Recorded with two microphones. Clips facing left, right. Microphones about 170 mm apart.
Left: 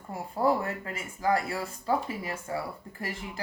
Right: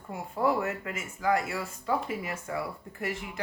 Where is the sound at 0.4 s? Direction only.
35° left (ahead or behind).